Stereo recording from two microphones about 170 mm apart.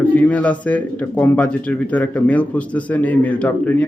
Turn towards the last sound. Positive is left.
turn(degrees=10)  # may be behind; listen again after turning